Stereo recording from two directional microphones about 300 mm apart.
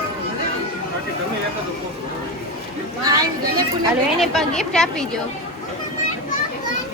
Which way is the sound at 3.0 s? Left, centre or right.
Centre.